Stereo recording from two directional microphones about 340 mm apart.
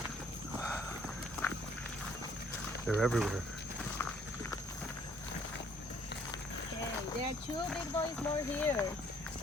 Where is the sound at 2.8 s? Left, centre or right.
Centre.